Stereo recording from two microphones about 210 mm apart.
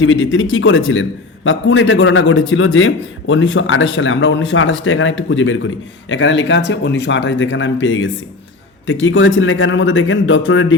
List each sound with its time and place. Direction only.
0.0 s a man's voice: 65° left (ahead or behind)